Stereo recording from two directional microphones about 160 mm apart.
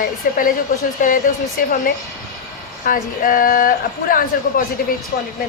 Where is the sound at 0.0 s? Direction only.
60° left (ahead or behind).